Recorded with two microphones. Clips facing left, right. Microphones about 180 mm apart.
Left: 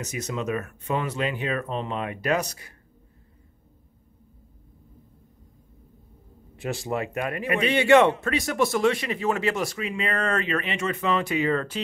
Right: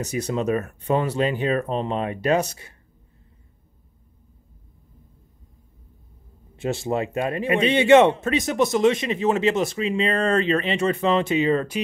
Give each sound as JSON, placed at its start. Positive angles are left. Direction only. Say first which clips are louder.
{"t": 0.0, "sound": "speech", "louder": "right 6 dB", "side_deg": -35}
{"t": 6.5, "sound": "a man's voice", "louder": "right 4 dB", "side_deg": -25}